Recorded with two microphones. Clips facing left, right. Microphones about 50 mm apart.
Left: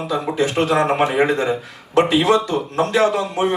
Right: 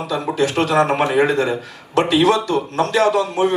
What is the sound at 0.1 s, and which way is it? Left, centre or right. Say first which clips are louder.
A man's voice: right 1 dB; left.